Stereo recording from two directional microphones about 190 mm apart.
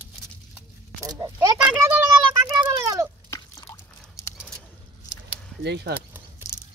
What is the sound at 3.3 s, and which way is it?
Drip, 20° left (ahead or behind).